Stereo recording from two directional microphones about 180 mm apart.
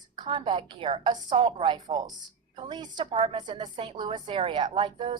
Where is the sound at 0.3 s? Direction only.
30° right (ahead or behind).